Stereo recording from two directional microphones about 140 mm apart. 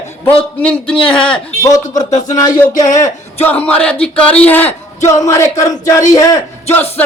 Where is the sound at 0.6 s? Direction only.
10° left (ahead or behind).